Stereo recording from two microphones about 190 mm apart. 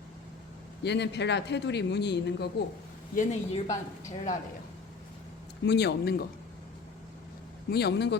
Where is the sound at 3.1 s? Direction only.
45° left (ahead or behind).